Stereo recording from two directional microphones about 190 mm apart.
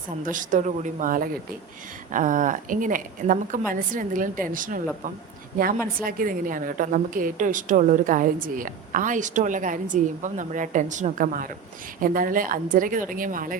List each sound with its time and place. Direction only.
0.2 s a woman's voice: 45° right (ahead or behind)